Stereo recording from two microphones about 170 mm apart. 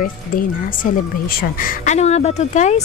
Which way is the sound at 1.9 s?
40° left (ahead or behind).